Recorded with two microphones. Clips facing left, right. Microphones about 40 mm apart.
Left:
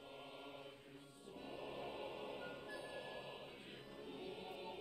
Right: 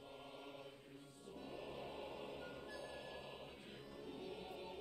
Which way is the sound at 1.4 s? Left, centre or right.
Centre.